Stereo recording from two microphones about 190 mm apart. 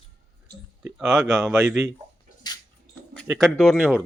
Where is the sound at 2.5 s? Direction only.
20° left (ahead or behind).